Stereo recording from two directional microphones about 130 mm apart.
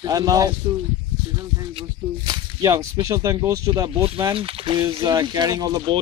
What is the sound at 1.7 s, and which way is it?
Speech, 40° right (ahead or behind).